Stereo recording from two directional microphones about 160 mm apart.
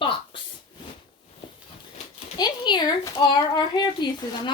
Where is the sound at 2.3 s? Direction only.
25° left (ahead or behind).